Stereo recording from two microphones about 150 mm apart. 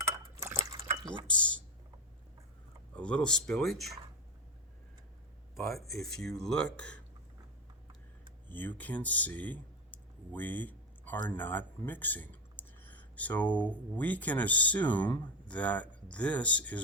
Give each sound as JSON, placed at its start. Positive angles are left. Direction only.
{"t": 0.3, "sound": "drip", "side_deg": -20}
{"t": 1.3, "sound": "a sound", "side_deg": 10}
{"t": 2.9, "sound": "speech", "side_deg": 5}
{"t": 5.5, "sound": "speech", "side_deg": 0}
{"t": 8.4, "sound": "speech", "side_deg": 10}